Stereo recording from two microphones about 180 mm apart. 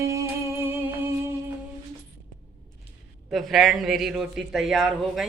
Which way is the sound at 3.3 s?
Centre (ahead or behind).